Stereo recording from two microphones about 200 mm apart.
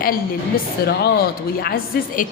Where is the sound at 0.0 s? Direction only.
45° left (ahead or behind).